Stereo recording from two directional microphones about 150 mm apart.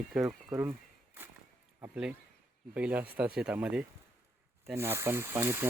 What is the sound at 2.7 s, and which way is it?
Speech, 10° right (ahead or behind).